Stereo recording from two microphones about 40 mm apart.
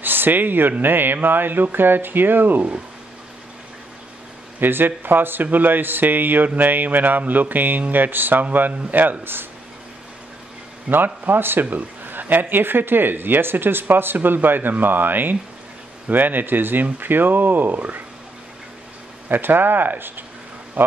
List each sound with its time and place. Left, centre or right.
0.0 s speech: right
4.6 s speech: right
9.2 s speech: right
10.9 s speech: right
19.2 s speech: right
20.8 s speech: right